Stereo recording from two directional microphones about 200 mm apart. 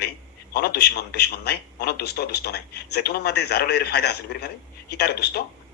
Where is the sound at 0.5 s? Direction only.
50° left (ahead or behind).